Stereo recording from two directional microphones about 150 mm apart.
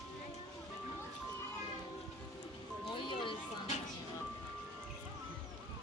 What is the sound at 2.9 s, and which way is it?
Music, 35° left (ahead or behind).